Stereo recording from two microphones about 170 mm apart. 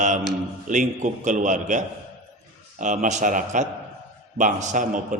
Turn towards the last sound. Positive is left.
turn(degrees=-45)  # may be behind; listen again after turning